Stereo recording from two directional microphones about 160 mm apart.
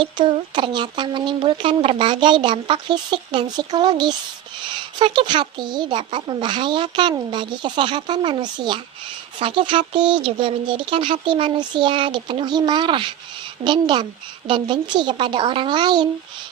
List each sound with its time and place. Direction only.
0.0 s speech: 30° right (ahead or behind)